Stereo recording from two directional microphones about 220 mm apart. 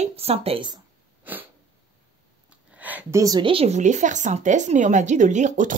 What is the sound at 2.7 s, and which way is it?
Speech, 5° right (ahead or behind).